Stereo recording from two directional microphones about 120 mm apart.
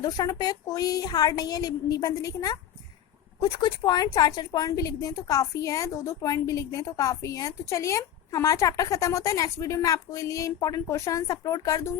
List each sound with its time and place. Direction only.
0.0 s a woman's voice: 35° left (ahead or behind)